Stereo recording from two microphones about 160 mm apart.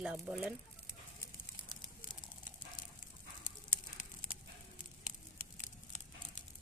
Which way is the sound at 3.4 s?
55° left (ahead or behind).